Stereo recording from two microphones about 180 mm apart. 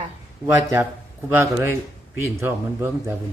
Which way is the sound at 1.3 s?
15° right (ahead or behind).